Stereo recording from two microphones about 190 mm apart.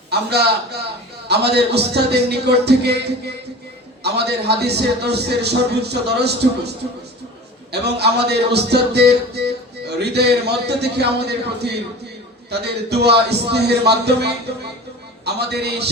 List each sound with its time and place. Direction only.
0.1 s a man's voice: 60° right (ahead or behind)
7.7 s a man's voice: 60° right (ahead or behind)